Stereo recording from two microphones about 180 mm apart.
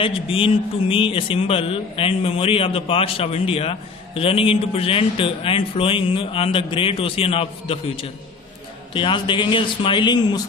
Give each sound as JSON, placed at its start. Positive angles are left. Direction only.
{"t": 0.0, "sound": "a man's voice", "side_deg": 30}